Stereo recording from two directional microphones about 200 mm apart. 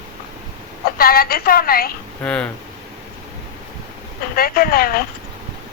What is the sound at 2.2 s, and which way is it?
Speech, 5° left (ahead or behind).